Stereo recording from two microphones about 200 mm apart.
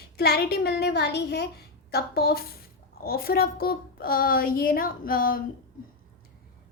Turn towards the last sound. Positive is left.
turn(degrees=45)  # may be behind; listen again after turning